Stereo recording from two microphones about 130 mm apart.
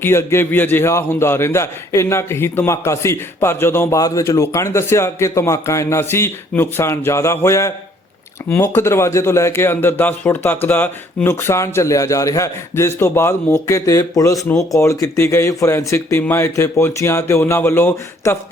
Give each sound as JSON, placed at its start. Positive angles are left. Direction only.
{"t": 0.0, "sound": "a man's voice", "side_deg": 20}